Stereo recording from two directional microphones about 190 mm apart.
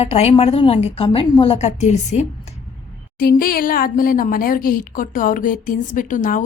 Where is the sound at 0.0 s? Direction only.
35° left (ahead or behind).